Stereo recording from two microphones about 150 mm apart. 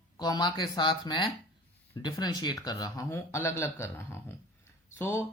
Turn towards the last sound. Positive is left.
turn(degrees=15)  # may be behind; listen again after turning